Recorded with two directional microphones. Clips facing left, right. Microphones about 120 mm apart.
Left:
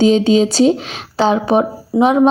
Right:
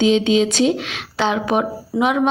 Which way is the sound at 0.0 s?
40° left (ahead or behind).